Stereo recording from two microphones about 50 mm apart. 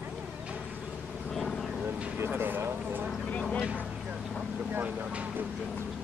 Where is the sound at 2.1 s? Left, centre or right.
Right.